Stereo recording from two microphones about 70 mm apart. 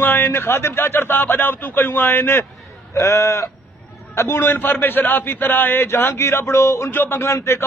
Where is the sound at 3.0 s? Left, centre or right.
Left.